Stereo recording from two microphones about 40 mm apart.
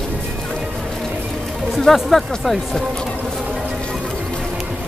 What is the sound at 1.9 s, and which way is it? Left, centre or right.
Speech, centre.